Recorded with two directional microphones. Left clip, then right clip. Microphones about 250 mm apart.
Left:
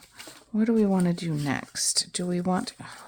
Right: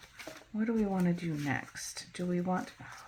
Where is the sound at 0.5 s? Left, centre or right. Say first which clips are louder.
Left 9 dB; left.